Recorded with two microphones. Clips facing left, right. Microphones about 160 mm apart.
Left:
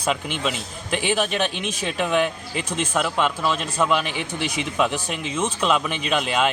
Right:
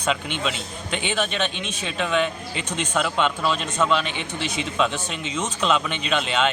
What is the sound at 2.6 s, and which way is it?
A man's voice, 5° left (ahead or behind).